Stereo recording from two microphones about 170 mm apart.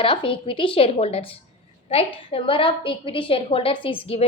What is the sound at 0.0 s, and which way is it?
A woman's voice, 30° left (ahead or behind).